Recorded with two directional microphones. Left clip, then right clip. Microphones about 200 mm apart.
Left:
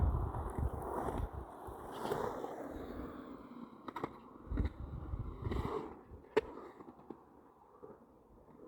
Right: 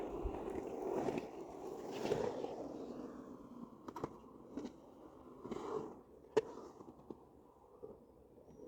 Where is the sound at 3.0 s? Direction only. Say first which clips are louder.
Left 3 dB; 30° left (ahead or behind).